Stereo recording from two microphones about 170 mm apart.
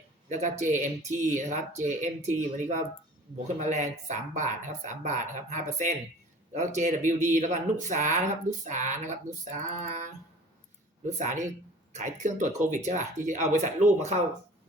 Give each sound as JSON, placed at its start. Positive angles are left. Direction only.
{"t": 0.3, "sound": "speech", "side_deg": -45}